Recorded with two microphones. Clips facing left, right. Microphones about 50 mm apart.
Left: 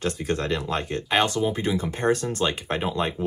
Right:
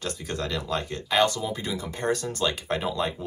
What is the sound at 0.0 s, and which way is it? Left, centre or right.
Speech, left.